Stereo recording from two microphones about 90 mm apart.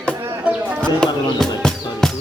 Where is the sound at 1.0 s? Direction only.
5° left (ahead or behind).